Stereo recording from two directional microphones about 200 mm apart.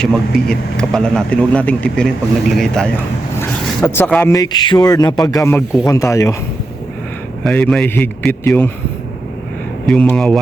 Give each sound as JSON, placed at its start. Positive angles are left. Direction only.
{"t": 0.0, "sound": "a man's voice", "side_deg": 5}
{"t": 7.4, "sound": "a man's voice", "side_deg": 5}
{"t": 9.8, "sound": "a man's voice", "side_deg": 5}